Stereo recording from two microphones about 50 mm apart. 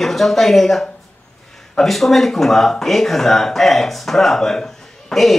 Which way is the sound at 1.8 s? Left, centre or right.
Centre.